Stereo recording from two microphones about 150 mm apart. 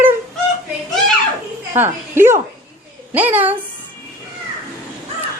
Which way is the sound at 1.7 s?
15° right (ahead or behind).